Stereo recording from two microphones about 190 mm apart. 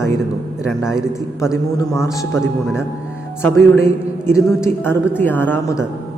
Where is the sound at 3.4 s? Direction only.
15° left (ahead or behind).